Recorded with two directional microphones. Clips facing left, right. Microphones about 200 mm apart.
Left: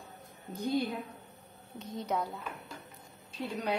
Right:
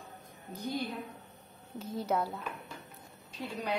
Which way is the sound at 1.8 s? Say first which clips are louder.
Right 2 dB; 5° right (ahead or behind).